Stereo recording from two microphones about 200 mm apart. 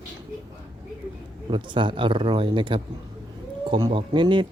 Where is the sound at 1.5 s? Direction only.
25° right (ahead or behind).